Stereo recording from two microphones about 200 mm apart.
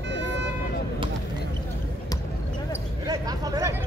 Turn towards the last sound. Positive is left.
turn(degrees=-15)  # may be behind; listen again after turning